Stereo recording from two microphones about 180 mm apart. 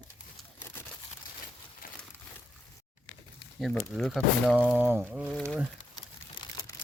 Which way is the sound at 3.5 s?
5° left (ahead or behind).